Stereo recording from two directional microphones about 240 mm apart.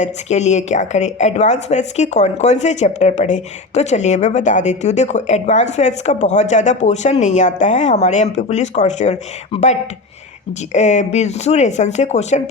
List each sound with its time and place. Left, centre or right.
0.0 s a woman's voice: left